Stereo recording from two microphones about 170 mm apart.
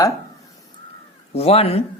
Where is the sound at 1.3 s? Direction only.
35° left (ahead or behind).